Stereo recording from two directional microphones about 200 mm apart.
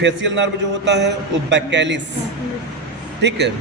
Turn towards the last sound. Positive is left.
turn(degrees=-60)  # may be behind; listen again after turning